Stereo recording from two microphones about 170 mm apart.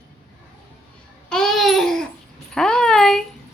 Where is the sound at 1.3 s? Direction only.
Centre (ahead or behind).